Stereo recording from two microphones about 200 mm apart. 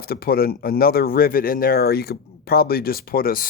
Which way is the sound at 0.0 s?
50° left (ahead or behind).